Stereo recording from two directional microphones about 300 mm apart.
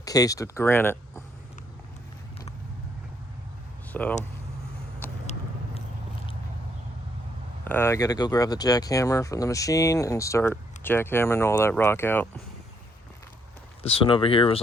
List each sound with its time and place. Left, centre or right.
0.0 s speech: centre
3.9 s speech: centre
5.2 s vehicle: left
7.6 s speech: centre
13.8 s speech: centre